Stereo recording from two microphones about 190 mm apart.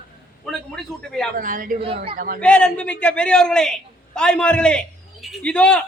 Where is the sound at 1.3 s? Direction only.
45° right (ahead or behind).